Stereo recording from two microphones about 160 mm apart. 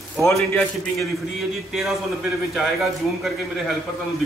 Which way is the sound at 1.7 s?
Centre (ahead or behind).